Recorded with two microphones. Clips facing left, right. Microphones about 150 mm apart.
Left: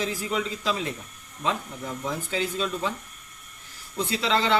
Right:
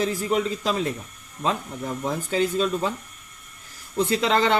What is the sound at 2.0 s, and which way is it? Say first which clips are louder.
Speech: right 5 dB; 45° right (ahead or behind).